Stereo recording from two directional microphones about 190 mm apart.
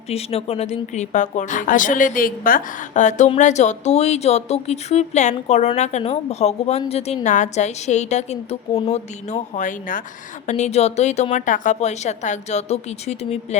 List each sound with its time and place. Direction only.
0.1 s a woman's voice: 30° left (ahead or behind)